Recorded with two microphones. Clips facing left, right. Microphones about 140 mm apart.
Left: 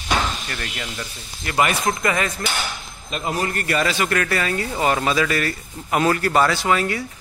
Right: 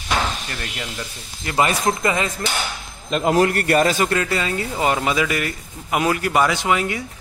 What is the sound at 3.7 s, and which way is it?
Speech, 45° right (ahead or behind).